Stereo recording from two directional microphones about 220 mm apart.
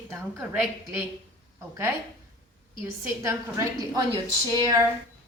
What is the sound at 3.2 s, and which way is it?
Speech, 15° right (ahead or behind).